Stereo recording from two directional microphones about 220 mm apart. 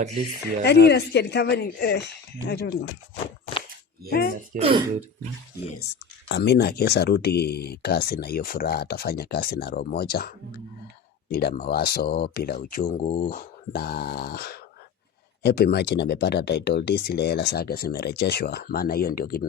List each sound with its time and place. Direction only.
0.3 s speech: 50° left (ahead or behind)
4.5 s speech: 25° right (ahead or behind)
5.8 s speech: 50° left (ahead or behind)